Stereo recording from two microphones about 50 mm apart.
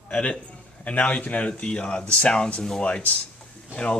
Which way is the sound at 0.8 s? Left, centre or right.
Left.